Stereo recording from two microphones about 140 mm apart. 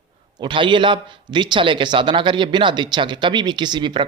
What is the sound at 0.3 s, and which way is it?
A man's voice, 35° right (ahead or behind).